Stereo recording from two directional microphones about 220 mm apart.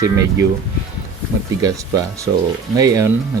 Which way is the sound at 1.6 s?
15° right (ahead or behind).